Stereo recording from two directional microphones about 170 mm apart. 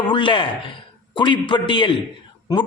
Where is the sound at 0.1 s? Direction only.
30° left (ahead or behind).